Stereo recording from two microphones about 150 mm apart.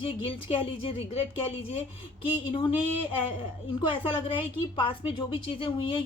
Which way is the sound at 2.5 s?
35° left (ahead or behind).